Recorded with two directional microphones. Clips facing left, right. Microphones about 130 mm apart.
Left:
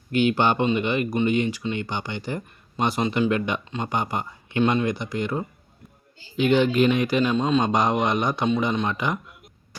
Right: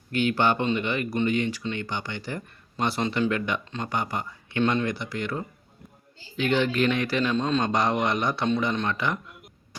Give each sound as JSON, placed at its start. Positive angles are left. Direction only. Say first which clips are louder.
{"t": 0.1, "sound": "a man's voice", "louder": "left 3 dB", "side_deg": 20}